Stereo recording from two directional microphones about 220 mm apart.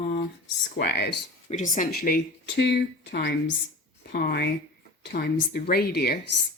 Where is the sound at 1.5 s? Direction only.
35° left (ahead or behind).